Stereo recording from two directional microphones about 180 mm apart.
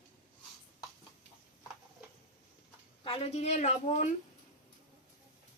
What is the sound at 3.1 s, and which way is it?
A woman's voice, 35° left (ahead or behind).